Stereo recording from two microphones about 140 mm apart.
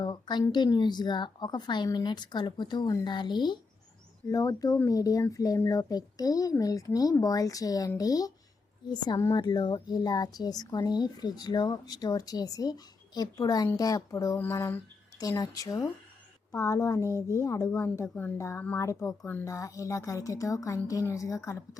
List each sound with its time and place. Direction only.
0.0 s a woman's voice: 30° left (ahead or behind)
17.1 s speech: 20° right (ahead or behind)
17.3 s a woman's voice: 25° left (ahead or behind)